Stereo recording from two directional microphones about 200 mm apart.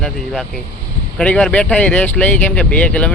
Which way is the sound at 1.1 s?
5° left (ahead or behind).